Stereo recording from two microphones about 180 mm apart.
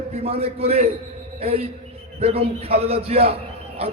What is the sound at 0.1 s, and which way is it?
A man's voice, 35° right (ahead or behind).